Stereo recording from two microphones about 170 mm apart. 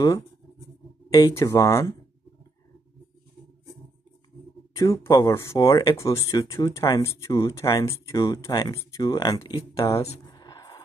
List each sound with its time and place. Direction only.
1.1 s speech: 20° left (ahead or behind)
4.7 s speech: 20° left (ahead or behind)
10.3 s a sound: 25° left (ahead or behind)